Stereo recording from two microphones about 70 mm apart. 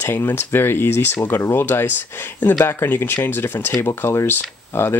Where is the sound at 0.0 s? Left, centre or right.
Left.